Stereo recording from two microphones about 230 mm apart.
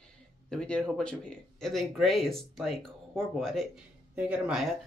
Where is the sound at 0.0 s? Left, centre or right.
Centre.